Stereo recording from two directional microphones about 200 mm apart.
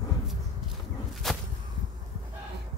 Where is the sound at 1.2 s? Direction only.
Centre (ahead or behind).